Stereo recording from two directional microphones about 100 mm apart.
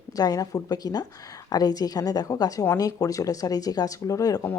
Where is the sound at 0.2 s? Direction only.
35° left (ahead or behind).